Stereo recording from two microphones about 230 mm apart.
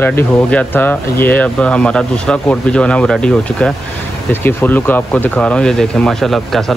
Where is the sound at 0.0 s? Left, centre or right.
Centre.